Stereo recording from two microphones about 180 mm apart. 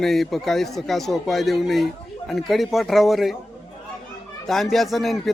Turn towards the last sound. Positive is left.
turn(degrees=0)  # may be behind; listen again after turning